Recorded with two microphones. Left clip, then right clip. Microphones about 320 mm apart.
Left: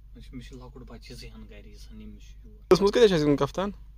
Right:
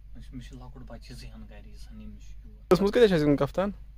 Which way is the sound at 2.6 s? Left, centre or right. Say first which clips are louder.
Left 2 dB; centre.